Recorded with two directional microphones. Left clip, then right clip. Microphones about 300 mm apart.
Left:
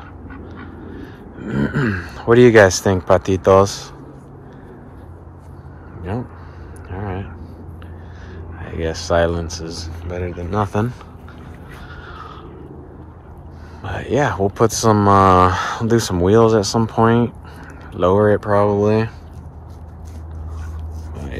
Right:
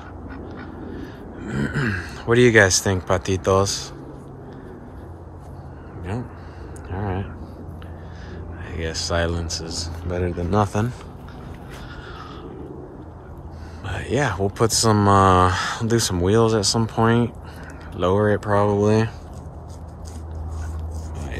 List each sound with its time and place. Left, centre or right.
0.5 s speech: centre
6.9 s a sound: centre
8.6 s speech: centre
13.8 s speech: centre